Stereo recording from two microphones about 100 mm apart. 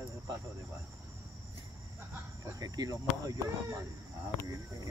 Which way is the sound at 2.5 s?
40° right (ahead or behind).